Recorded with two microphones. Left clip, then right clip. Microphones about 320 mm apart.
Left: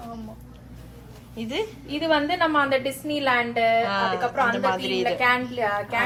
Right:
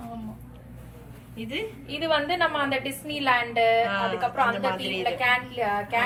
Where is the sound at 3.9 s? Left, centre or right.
Centre.